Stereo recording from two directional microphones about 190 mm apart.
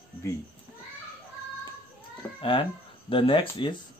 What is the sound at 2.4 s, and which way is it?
Speech, 25° left (ahead or behind).